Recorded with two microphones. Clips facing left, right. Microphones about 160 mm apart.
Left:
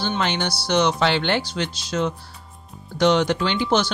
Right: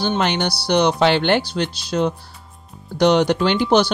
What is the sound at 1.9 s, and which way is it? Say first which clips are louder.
Speech: right 4 dB; 45° right (ahead or behind).